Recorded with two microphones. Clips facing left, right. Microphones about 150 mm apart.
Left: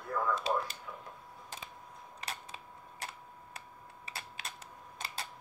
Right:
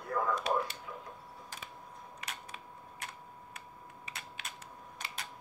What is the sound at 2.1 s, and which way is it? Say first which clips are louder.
Typewriter: left 3 dB; 30° left (ahead or behind).